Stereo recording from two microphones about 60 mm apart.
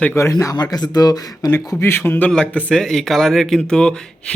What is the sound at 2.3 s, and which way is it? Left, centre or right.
Speech, centre.